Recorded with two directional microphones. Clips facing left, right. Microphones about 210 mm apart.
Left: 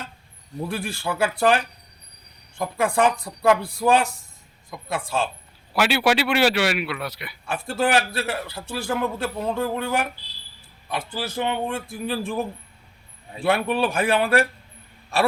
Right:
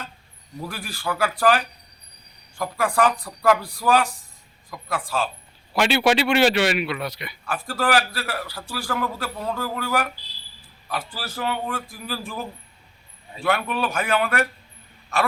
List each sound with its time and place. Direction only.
0.7 s a man's voice: 25° left (ahead or behind)
5.7 s a man's voice: 5° left (ahead or behind)
7.4 s a man's voice: 25° left (ahead or behind)
13.4 s a man's voice: 30° left (ahead or behind)